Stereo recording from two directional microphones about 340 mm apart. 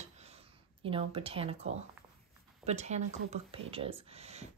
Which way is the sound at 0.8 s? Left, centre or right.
Centre.